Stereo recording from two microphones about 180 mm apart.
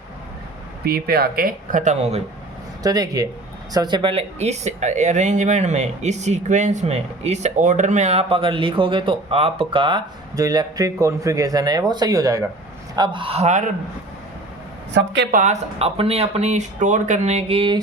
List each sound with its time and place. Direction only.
0.9 s speech: 60° right (ahead or behind); by 2.2 s 35° right (ahead or behind)
2.8 s speech: 20° right (ahead or behind); by 13.7 s 40° right (ahead or behind)
14.9 s a woman's voice: 75° right (ahead or behind)
15.3 s speech: 45° right (ahead or behind)